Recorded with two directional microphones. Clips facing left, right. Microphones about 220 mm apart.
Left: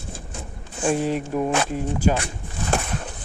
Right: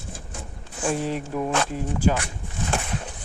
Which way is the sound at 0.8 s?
15° left (ahead or behind).